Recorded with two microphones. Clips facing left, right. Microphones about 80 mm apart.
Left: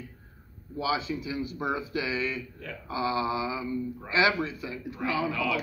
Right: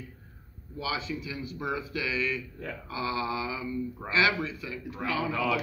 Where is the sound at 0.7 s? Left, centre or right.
Left.